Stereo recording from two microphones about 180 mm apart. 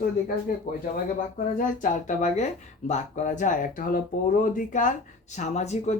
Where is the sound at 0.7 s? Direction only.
50° left (ahead or behind).